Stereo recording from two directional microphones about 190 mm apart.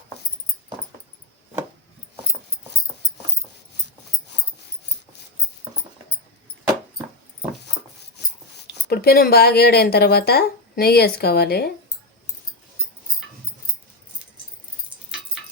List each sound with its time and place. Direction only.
8.9 s speech: 55° left (ahead or behind)